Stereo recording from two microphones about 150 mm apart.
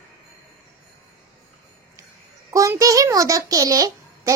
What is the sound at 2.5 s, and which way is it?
A child's voice, 20° right (ahead or behind).